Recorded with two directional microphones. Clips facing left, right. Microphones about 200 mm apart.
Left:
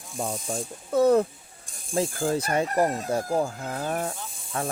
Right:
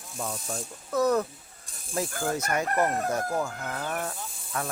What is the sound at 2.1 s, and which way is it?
Chicken, 30° left (ahead or behind).